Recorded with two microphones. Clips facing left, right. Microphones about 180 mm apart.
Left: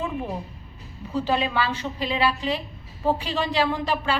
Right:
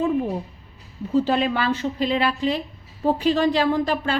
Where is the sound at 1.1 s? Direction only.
50° right (ahead or behind).